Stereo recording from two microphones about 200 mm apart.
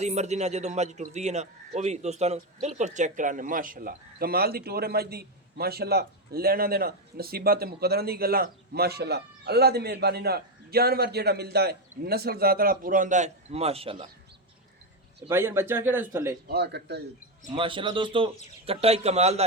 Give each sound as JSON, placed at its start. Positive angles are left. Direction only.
{"t": 0.0, "sound": "a man's voice", "side_deg": -35}
{"t": 15.3, "sound": "speech", "side_deg": -10}
{"t": 16.5, "sound": "a man's voice", "side_deg": -55}
{"t": 17.5, "sound": "a man's voice", "side_deg": -25}